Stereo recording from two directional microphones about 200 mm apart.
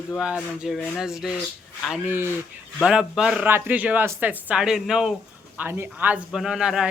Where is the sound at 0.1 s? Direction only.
Centre (ahead or behind).